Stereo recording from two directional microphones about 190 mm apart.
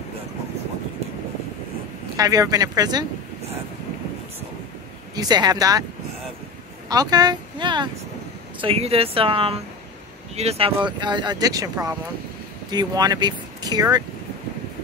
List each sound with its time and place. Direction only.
2.1 s speech: 20° right (ahead or behind)
5.1 s speech: 20° right (ahead or behind)
6.9 s speech: 20° right (ahead or behind)